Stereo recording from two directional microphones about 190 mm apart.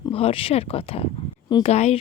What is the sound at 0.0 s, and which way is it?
A woman's voice, 30° left (ahead or behind).